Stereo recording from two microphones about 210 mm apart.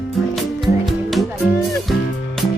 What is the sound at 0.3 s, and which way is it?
Music, centre (ahead or behind).